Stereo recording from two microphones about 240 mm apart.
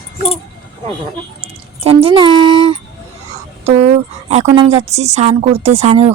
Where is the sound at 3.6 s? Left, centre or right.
Right.